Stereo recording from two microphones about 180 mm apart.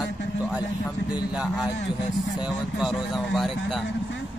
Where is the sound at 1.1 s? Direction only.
5° right (ahead or behind).